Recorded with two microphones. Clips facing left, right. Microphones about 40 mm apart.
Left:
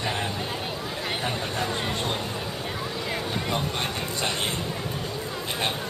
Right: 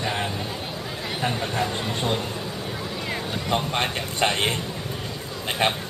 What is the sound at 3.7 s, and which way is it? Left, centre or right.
Speech, right.